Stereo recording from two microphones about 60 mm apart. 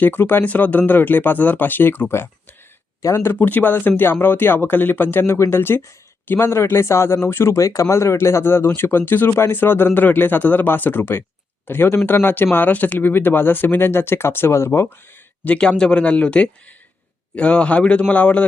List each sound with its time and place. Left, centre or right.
0.0 s speech: left
3.0 s speech: left
3.3 s speech: left
5.2 s a man's voice: left
15.4 s a man's voice: centre